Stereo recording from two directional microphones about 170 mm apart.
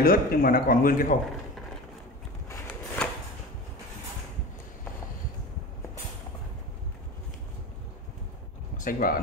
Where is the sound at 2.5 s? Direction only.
10° left (ahead or behind).